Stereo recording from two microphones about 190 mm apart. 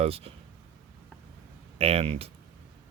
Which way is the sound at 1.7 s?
35° right (ahead or behind).